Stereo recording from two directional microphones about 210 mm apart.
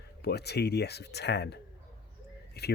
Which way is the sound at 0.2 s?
50° left (ahead or behind).